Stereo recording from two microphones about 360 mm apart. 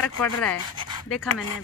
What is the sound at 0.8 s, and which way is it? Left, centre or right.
Pant, centre.